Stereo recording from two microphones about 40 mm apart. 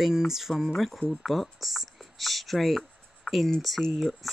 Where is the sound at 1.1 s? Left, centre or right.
Centre.